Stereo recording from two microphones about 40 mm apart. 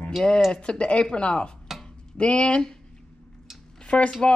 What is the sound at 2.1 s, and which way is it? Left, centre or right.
Speech, left.